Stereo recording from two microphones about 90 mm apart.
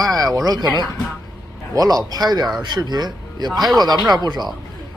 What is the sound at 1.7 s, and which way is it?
A man's voice, 45° right (ahead or behind).